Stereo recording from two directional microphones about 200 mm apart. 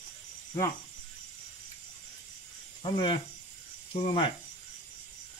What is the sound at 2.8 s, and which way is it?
Speech, 25° left (ahead or behind).